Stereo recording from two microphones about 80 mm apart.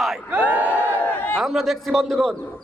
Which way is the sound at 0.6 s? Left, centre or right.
Left.